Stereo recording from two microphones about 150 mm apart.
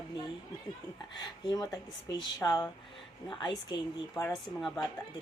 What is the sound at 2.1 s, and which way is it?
Speech, 25° left (ahead or behind).